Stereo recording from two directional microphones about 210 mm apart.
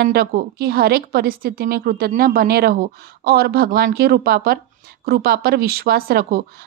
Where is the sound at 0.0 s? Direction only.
45° right (ahead or behind).